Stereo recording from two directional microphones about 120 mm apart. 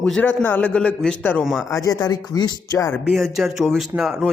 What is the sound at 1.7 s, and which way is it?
Speech, 25° left (ahead or behind).